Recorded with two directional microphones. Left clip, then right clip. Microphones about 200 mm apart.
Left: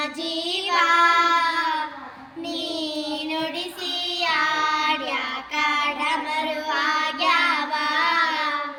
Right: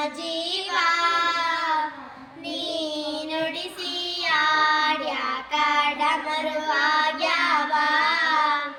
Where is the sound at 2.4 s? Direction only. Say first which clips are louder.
Even; 20° right (ahead or behind).